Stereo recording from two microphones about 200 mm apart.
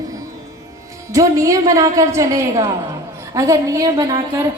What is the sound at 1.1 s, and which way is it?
A woman's voice, 15° right (ahead or behind).